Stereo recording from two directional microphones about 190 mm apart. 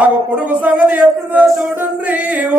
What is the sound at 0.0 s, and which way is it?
Speech, 5° right (ahead or behind).